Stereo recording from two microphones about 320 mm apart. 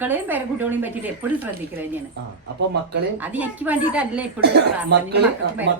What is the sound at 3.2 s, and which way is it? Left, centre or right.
A woman's voice, centre.